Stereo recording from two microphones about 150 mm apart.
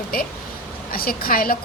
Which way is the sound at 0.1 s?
75° left (ahead or behind).